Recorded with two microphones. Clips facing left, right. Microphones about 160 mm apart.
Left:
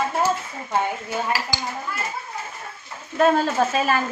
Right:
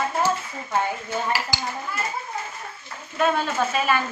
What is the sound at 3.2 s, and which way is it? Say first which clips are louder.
Speech: left 4 dB; 40° left (ahead or behind).